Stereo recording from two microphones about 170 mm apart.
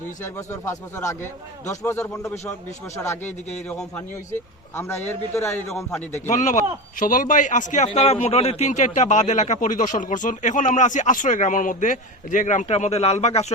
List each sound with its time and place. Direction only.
0.3 s a man's voice: 15° left (ahead or behind)
7.0 s speech: 50° left (ahead or behind)
7.9 s speech: 35° left (ahead or behind)